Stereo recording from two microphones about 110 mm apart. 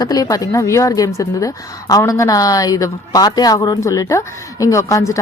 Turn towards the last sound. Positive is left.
turn(degrees=30)  # may be behind; listen again after turning